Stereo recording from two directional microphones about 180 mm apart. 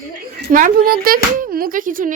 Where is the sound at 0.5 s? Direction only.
50° right (ahead or behind).